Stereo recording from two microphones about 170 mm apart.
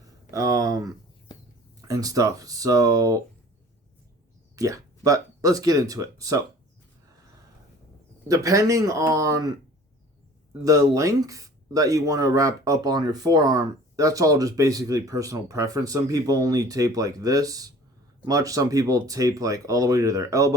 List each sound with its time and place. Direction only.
0.3 s speech: 20° right (ahead or behind)
1.3 s a sound: 25° left (ahead or behind)
1.9 s speech: 20° right (ahead or behind)
4.5 s speech: 20° right (ahead or behind)
8.3 s speech: 20° right (ahead or behind)
10.6 s speech: 20° right (ahead or behind)